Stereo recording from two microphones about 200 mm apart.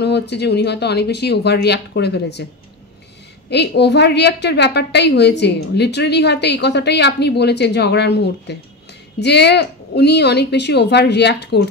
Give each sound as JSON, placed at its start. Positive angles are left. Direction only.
{"t": 0.0, "sound": "a woman's voice", "side_deg": 55}
{"t": 3.4, "sound": "a woman's voice", "side_deg": 55}